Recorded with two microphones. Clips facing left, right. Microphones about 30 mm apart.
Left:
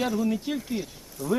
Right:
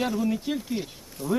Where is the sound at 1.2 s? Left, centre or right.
Right.